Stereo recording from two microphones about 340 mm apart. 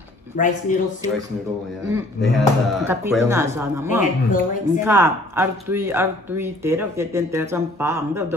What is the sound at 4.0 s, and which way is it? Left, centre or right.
Speech, left.